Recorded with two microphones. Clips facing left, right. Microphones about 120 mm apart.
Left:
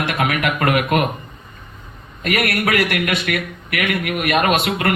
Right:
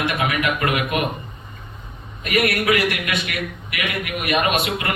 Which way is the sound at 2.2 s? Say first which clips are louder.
Left 1 dB; 60° left (ahead or behind).